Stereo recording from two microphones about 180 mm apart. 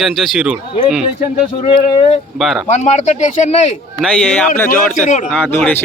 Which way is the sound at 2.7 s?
40° left (ahead or behind).